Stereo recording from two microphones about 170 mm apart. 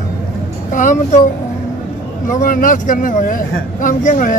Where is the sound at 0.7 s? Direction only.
50° left (ahead or behind).